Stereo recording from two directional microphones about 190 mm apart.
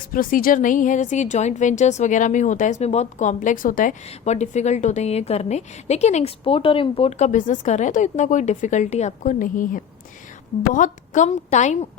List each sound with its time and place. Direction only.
0.1 s a woman's voice: 50° left (ahead or behind)